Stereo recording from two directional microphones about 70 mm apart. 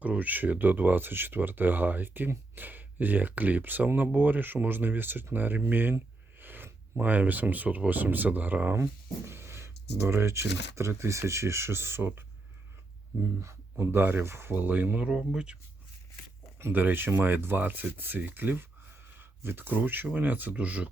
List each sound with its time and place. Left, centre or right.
0.0 s speech: right
6.4 s a sound: right
6.9 s speech: right
8.7 s speech: right
13.4 s speech: right
14.5 s speech: right
15.0 s speech: centre
16.6 s speech: right